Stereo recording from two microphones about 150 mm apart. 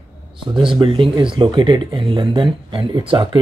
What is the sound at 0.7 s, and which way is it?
Speech, 35° right (ahead or behind).